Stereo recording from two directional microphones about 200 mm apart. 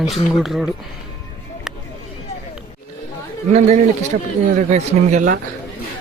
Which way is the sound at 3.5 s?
35° right (ahead or behind).